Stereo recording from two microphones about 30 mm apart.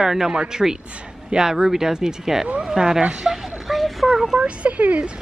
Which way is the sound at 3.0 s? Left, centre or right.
Right.